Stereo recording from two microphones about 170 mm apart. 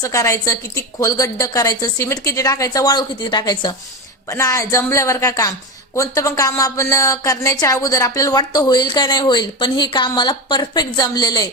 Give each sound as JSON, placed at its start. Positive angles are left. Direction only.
{"t": 0.0, "sound": "a woman's voice", "side_deg": 20}